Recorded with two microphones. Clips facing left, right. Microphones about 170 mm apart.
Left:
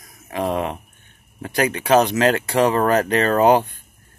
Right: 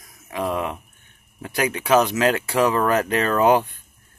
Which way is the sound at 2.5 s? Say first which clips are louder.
Left 2 dB; 35° left (ahead or behind).